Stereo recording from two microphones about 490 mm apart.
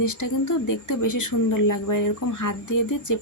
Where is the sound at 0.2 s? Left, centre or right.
Left.